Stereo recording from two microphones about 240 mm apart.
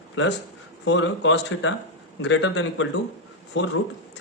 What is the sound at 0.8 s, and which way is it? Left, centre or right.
A man's voice, left.